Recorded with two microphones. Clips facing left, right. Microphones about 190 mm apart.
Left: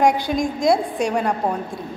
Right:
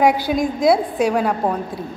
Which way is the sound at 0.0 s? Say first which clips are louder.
Right 2 dB; 5° right (ahead or behind).